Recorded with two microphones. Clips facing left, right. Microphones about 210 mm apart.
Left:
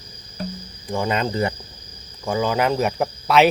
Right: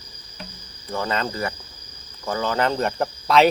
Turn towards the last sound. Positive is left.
turn(degrees=5)  # may be behind; listen again after turning